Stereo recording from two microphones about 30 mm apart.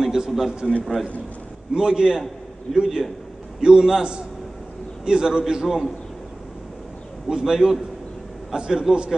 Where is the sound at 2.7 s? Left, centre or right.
Centre.